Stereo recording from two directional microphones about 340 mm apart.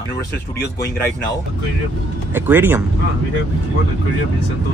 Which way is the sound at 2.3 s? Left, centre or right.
Centre.